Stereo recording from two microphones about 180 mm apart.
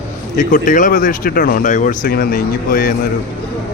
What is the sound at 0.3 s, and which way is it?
Speech, 50° left (ahead or behind).